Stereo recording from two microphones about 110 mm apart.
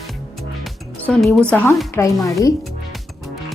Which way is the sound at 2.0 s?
25° left (ahead or behind).